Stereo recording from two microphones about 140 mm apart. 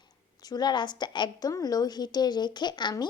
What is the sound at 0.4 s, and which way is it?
A woman's voice, 30° left (ahead or behind).